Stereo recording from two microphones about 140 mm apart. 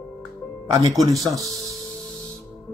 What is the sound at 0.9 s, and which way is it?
Speech, 25° right (ahead or behind).